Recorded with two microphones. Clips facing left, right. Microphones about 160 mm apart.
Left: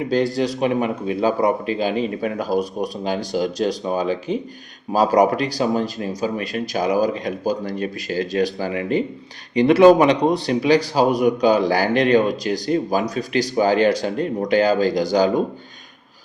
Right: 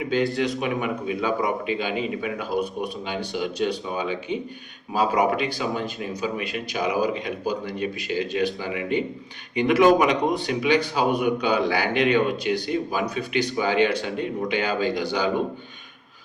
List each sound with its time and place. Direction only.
0.1 s speech: 40° left (ahead or behind)